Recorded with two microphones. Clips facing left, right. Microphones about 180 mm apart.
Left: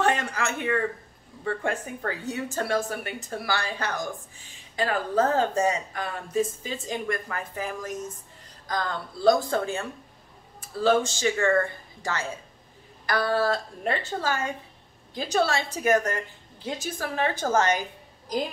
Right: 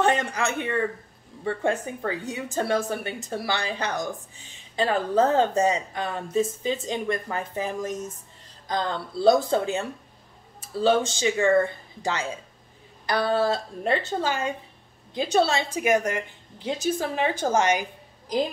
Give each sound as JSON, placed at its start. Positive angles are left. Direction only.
{"t": 0.0, "sound": "a woman's voice", "side_deg": -20}